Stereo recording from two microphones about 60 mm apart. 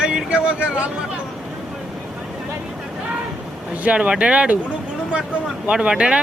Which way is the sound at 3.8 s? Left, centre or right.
Right.